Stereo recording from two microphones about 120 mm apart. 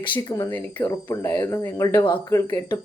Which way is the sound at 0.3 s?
15° left (ahead or behind).